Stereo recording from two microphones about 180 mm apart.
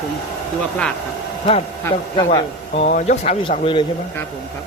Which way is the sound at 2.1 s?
30° left (ahead or behind).